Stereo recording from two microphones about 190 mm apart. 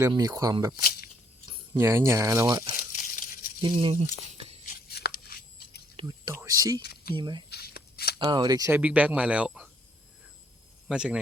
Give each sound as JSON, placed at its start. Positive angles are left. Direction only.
{"t": 0.0, "sound": "speech", "side_deg": -20}
{"t": 0.8, "sound": "speech", "side_deg": 50}
{"t": 1.5, "sound": "speech", "side_deg": -15}
{"t": 2.9, "sound": "tearing", "side_deg": 45}
{"t": 3.6, "sound": "speech", "side_deg": -25}
{"t": 4.9, "sound": "a sound", "side_deg": 55}
{"t": 6.0, "sound": "speech", "side_deg": -20}
{"t": 7.5, "sound": "shuffling cards", "side_deg": 55}
{"t": 8.2, "sound": "speech", "side_deg": -20}
{"t": 8.7, "sound": "speech", "side_deg": -5}
{"t": 10.8, "sound": "speech", "side_deg": -5}